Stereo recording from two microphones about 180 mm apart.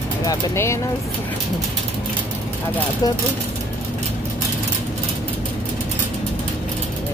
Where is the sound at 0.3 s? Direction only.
20° left (ahead or behind).